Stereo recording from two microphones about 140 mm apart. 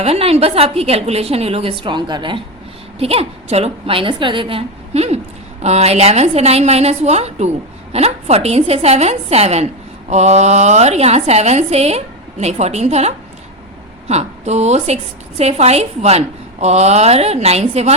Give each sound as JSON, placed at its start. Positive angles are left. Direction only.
{"t": 0.0, "sound": "a woman's voice", "side_deg": -45}
{"t": 3.0, "sound": "a woman's voice", "side_deg": -45}